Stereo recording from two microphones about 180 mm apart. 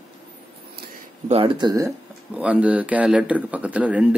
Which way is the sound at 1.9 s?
10° right (ahead or behind).